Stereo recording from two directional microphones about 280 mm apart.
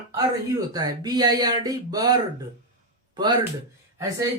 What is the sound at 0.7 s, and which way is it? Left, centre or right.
Speech, centre.